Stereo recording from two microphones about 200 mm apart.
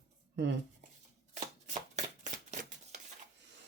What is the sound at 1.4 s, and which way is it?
Shuffling cards, 35° right (ahead or behind).